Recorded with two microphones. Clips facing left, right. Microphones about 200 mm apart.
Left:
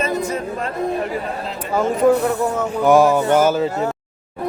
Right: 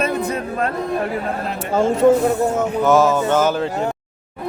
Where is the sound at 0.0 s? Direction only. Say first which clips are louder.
Right 1 dB; 60° right (ahead or behind).